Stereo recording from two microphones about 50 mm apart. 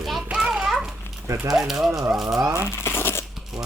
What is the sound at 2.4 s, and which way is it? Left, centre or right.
Speech, right.